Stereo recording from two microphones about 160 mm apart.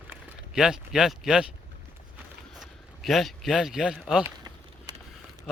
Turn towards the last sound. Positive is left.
turn(degrees=-25)  # may be behind; listen again after turning